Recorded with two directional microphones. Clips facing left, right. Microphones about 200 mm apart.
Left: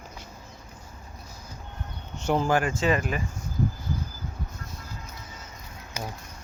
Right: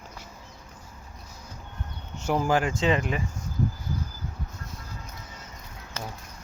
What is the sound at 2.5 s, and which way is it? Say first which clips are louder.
Speech: even; 15° right (ahead or behind).